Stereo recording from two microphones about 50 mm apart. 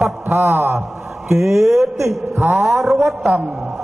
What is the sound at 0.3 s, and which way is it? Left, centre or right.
Speech, right.